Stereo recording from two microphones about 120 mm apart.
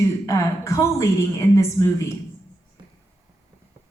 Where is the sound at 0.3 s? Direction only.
25° left (ahead or behind).